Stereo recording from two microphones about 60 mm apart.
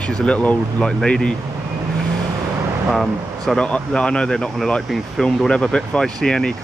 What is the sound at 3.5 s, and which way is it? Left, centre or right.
Speech, centre.